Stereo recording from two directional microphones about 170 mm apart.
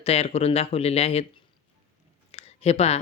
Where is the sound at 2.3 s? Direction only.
35° left (ahead or behind).